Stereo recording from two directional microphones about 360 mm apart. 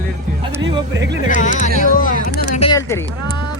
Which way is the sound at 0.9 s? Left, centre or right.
Right.